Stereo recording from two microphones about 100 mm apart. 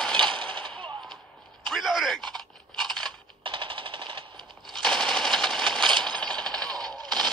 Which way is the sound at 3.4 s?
55° right (ahead or behind).